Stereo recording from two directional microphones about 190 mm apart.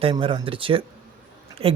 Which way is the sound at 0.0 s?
25° right (ahead or behind).